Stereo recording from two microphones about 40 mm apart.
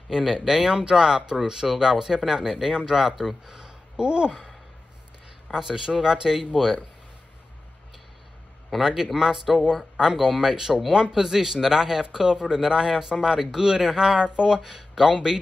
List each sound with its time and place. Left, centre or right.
0.1 s speech: centre
5.5 s speech: centre
8.8 s speech: centre
14.6 s speech: centre